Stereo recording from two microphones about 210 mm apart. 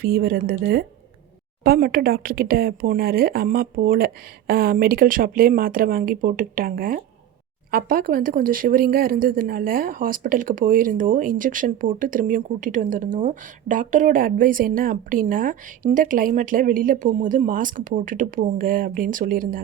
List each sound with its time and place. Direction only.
0.0 s speech: 45° right (ahead or behind)